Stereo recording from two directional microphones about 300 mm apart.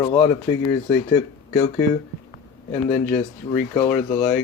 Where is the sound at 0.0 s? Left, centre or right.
Centre.